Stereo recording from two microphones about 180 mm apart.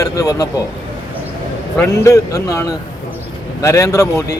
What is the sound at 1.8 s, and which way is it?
A man's voice, 15° left (ahead or behind).